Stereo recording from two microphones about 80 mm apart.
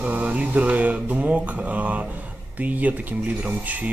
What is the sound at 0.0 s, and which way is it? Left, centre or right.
Mantra, centre.